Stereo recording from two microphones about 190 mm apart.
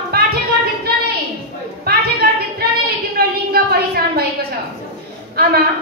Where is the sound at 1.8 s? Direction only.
55° right (ahead or behind).